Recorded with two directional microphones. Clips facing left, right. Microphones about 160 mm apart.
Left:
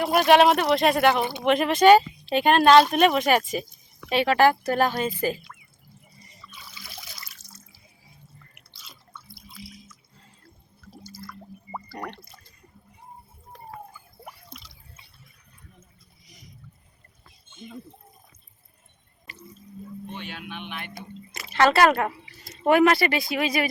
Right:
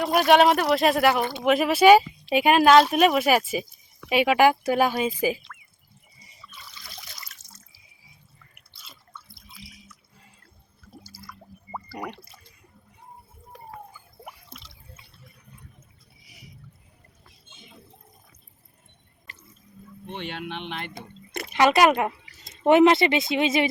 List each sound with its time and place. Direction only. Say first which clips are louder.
0.0 s speech: even; centre (ahead or behind)
6.2 s trickle: right 1 dB; 5° right (ahead or behind)
8.8 s drip: even; centre (ahead or behind)
11.0 s water: left 5 dB; 10° right (ahead or behind)
14.3 s drip: even; centre (ahead or behind)
16.2 s boat: right 1 dB; 10° right (ahead or behind)
20.3 s speech: right 4 dB; 65° right (ahead or behind)
21.5 s speech: even; 15° right (ahead or behind)